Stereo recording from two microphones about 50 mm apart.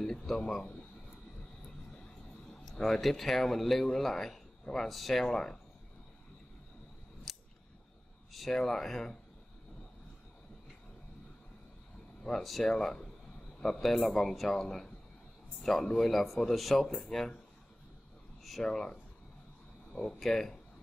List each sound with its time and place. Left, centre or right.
0.0 s speech: centre
2.7 s speech: centre
7.3 s scissors: centre
8.3 s speech: centre
12.2 s speech: centre
12.4 s speech: centre
12.7 s a man's voice: centre
18.6 s speech: centre